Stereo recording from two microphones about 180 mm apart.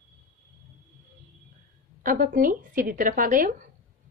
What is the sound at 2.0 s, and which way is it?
A woman's voice, 50° right (ahead or behind).